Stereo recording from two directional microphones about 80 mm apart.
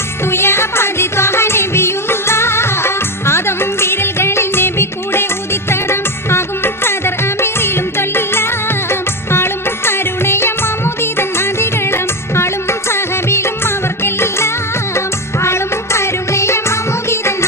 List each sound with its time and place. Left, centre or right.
0.3 s music: left
6.8 s music: left